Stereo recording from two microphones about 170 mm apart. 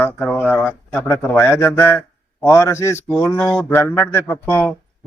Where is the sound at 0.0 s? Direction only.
10° left (ahead or behind).